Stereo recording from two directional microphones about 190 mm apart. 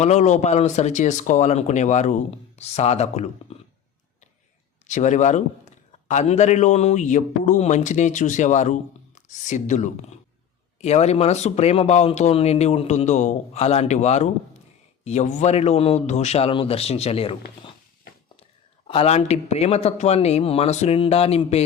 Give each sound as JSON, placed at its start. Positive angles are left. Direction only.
{"t": 0.0, "sound": "a man's voice", "side_deg": 35}
{"t": 4.9, "sound": "a man's voice", "side_deg": 40}
{"t": 18.9, "sound": "a man's voice", "side_deg": 30}